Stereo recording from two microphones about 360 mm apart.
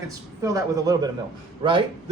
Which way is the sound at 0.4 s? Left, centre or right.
Centre.